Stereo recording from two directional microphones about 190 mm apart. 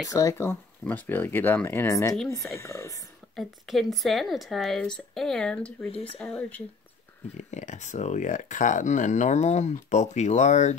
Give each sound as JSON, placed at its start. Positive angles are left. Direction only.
{"t": 0.1, "sound": "speech", "side_deg": 15}
{"t": 3.3, "sound": "speech", "side_deg": 0}
{"t": 5.9, "sound": "speech", "side_deg": 30}
{"t": 6.1, "sound": "speech", "side_deg": 5}
{"t": 7.3, "sound": "speech", "side_deg": 40}